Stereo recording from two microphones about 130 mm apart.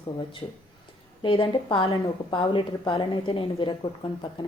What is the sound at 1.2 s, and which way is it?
A woman's voice, 40° left (ahead or behind).